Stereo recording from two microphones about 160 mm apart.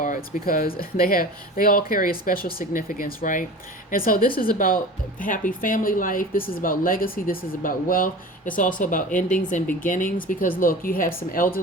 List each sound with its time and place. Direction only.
0.0 s speech: 60° left (ahead or behind)